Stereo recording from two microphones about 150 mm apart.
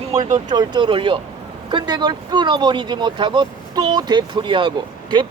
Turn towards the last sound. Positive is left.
turn(degrees=-30)  # may be behind; listen again after turning